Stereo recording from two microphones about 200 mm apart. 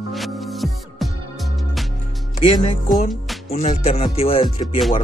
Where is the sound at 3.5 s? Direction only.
35° left (ahead or behind).